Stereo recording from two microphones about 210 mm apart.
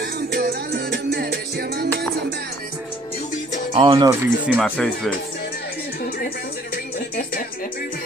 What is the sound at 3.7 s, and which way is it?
Speech, 25° right (ahead or behind).